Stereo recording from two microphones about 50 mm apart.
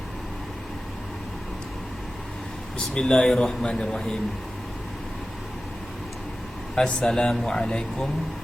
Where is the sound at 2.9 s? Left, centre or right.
Centre.